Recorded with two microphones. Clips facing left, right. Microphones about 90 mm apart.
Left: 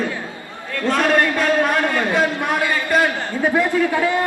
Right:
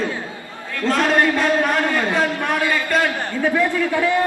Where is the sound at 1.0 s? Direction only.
15° right (ahead or behind).